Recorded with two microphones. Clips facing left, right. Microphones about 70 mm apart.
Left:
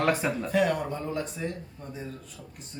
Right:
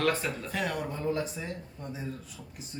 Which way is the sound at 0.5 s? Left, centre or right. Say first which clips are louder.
Left 8 dB; centre.